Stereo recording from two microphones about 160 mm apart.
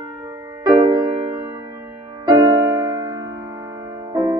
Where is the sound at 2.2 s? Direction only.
20° right (ahead or behind).